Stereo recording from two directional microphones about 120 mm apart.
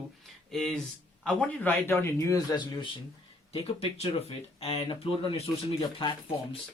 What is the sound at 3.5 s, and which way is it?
Speech, 55° left (ahead or behind).